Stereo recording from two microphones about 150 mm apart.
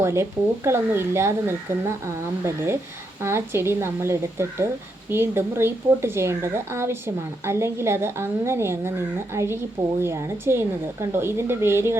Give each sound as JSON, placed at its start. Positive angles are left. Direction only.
{"t": 0.0, "sound": "a woman's voice", "side_deg": -15}